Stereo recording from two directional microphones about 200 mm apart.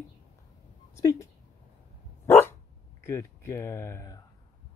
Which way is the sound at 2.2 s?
15° left (ahead or behind).